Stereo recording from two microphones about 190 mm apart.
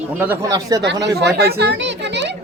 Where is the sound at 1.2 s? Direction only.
60° right (ahead or behind).